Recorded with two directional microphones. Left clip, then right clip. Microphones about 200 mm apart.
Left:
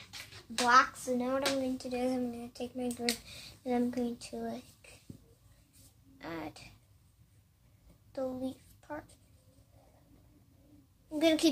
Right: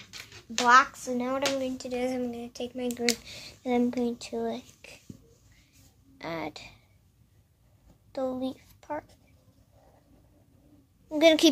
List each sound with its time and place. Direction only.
0.7 s speech: 45° right (ahead or behind)
6.1 s speech: 40° right (ahead or behind)
8.1 s a child's voice: 40° right (ahead or behind)
11.1 s a woman's voice: 45° right (ahead or behind)